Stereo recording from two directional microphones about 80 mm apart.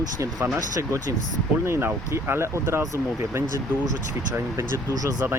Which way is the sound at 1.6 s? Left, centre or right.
Right.